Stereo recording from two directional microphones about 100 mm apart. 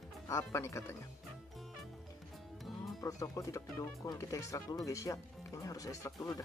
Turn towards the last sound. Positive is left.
turn(degrees=35)  # may be behind; listen again after turning